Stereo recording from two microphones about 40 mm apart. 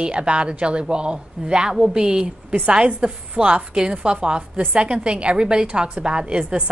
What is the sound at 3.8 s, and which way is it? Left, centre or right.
A woman's voice, right.